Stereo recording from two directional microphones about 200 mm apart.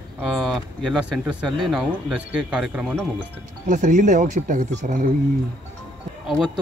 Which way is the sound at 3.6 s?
40° right (ahead or behind).